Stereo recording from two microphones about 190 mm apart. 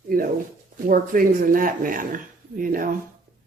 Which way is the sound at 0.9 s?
50° right (ahead or behind).